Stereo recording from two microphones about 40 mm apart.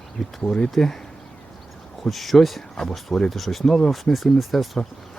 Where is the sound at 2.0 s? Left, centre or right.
Centre.